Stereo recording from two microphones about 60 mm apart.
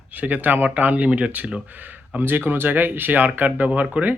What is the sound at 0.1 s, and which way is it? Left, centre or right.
Speech, right.